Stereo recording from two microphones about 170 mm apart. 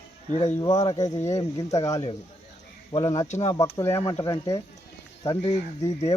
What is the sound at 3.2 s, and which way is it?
Speech, 45° left (ahead or behind).